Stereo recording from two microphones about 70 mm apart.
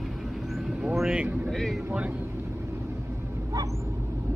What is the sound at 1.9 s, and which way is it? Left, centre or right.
Speech, right.